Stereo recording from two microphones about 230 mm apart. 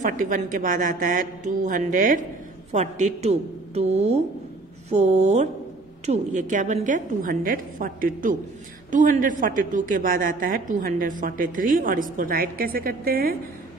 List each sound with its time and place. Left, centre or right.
0.0 s a woman's voice: right